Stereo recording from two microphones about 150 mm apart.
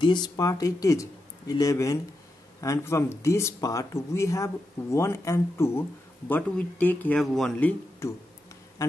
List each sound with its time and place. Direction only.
0.0 s speech: 30° left (ahead or behind); by 7.5 s centre (ahead or behind)
7.5 s speech: 10° left (ahead or behind)